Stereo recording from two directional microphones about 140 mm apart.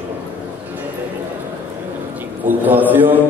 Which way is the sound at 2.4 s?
15° right (ahead or behind).